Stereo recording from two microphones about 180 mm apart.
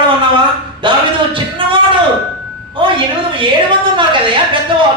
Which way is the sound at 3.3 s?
25° right (ahead or behind).